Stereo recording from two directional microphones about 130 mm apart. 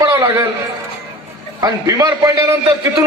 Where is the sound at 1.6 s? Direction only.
25° right (ahead or behind).